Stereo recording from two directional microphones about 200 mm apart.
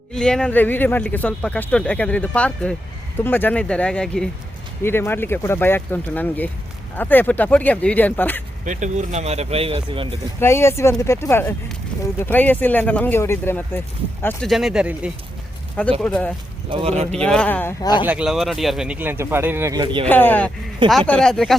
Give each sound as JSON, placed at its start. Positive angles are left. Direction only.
{"t": 0.1, "sound": "speech", "side_deg": 5}
{"t": 8.6, "sound": "speech", "side_deg": -35}
{"t": 10.4, "sound": "speech", "side_deg": 15}
{"t": 14.5, "sound": "speech", "side_deg": 0}
{"t": 16.6, "sound": "speech", "side_deg": -30}
{"t": 17.2, "sound": "speech", "side_deg": 5}
{"t": 18.0, "sound": "speech", "side_deg": -5}
{"t": 20.1, "sound": "speech", "side_deg": 10}